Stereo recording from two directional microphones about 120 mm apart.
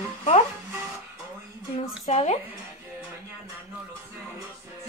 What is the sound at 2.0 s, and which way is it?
Speech, 65° left (ahead or behind).